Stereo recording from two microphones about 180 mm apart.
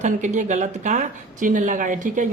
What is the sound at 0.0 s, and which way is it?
A man's voice, 45° right (ahead or behind).